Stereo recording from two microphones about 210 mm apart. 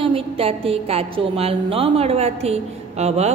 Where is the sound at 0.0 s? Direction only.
25° right (ahead or behind).